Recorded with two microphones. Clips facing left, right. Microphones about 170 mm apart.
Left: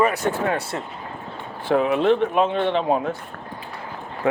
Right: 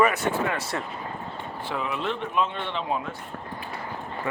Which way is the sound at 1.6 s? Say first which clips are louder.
Left 12 dB; 55° left (ahead or behind).